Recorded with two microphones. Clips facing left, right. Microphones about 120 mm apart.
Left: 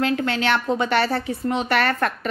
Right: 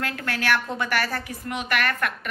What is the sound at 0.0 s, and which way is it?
A woman's voice, 20° left (ahead or behind).